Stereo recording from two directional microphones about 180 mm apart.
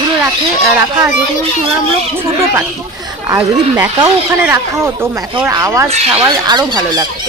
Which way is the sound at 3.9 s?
20° right (ahead or behind).